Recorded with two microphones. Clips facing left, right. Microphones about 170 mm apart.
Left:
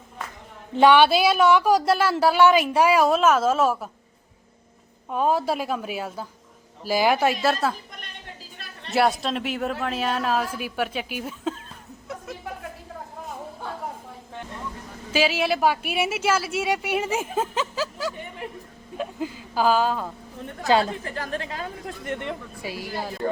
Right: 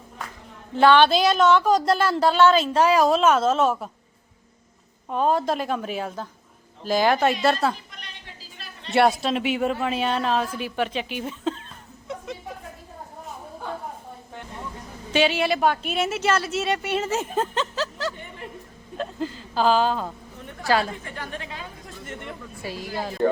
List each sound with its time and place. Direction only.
0.7 s a woman's voice: 15° left (ahead or behind)
5.0 s a woman's voice: 5° left (ahead or behind)
8.9 s speech: centre (ahead or behind)
15.1 s a woman's voice: 5° left (ahead or behind)
21.2 s speech: 40° left (ahead or behind)
21.8 s speech: 75° left (ahead or behind)
22.6 s a woman's voice: 10° left (ahead or behind)